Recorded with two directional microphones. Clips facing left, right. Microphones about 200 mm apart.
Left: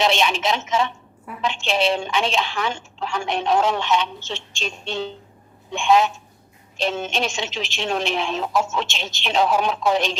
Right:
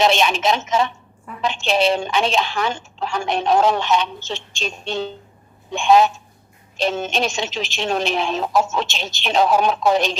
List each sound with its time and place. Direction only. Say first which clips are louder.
0.0 s a woman's voice: right 3 dB; 45° right (ahead or behind)